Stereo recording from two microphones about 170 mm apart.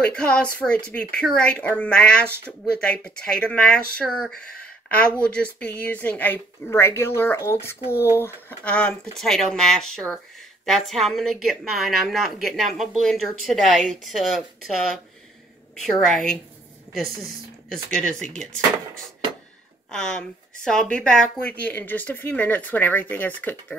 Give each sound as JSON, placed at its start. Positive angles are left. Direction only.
{"t": 0.0, "sound": "a woman's voice", "side_deg": 5}
{"t": 2.2, "sound": "speech", "side_deg": -15}
{"t": 2.6, "sound": "a woman's voice", "side_deg": 5}
{"t": 17.9, "sound": "a woman's voice", "side_deg": 5}
{"t": 19.9, "sound": "speech", "side_deg": 5}